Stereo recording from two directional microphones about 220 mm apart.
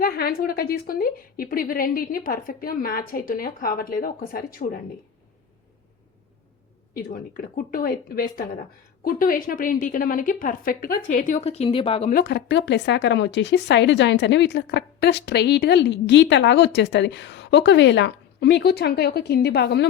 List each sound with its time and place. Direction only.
0.0 s a woman's voice: 45° left (ahead or behind)
6.9 s a woman's voice: 40° left (ahead or behind)
12.1 s speech: 50° left (ahead or behind)